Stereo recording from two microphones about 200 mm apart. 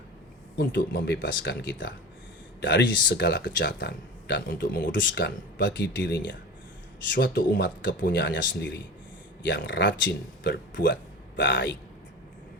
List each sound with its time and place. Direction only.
0.6 s speech: 55° left (ahead or behind)